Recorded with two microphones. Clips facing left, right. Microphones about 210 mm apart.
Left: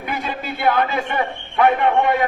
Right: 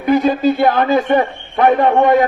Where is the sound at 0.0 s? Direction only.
40° right (ahead or behind).